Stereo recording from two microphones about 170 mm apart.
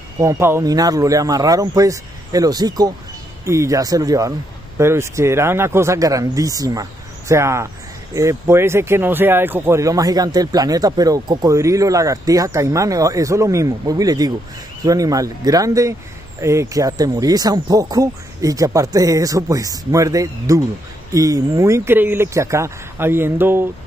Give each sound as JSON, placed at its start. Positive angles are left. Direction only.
{"t": 0.2, "sound": "speech", "side_deg": -15}